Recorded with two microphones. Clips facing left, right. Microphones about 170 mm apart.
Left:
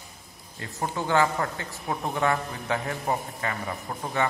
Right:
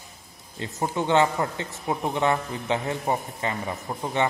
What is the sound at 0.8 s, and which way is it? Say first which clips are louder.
A man's voice: right 3 dB; 20° right (ahead or behind).